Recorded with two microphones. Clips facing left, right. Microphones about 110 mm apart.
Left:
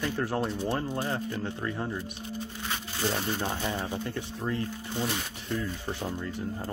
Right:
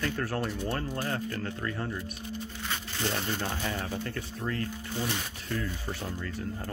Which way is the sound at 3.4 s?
20° left (ahead or behind).